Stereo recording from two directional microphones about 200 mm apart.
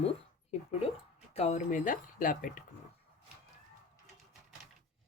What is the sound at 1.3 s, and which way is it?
Speech, 35° left (ahead or behind).